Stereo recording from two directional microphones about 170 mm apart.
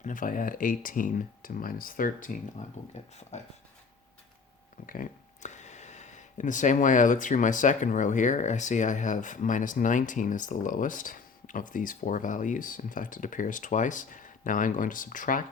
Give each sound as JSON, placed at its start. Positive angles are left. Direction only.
{"t": 0.0, "sound": "speech", "side_deg": 50}
{"t": 2.8, "sound": "speech", "side_deg": 45}
{"t": 4.9, "sound": "speech", "side_deg": 50}